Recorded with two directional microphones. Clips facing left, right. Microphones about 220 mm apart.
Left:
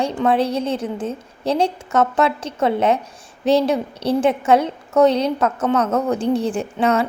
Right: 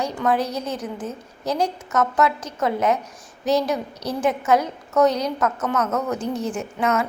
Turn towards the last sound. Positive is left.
turn(degrees=30)  # may be behind; listen again after turning